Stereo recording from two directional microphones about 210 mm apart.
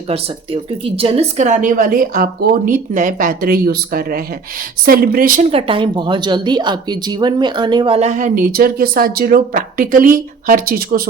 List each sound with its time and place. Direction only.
0.1 s speech: 30° right (ahead or behind)
5.5 s a woman's voice: 25° right (ahead or behind); by 11.1 s 45° right (ahead or behind)